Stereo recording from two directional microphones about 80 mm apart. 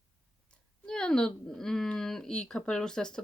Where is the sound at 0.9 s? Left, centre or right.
Centre.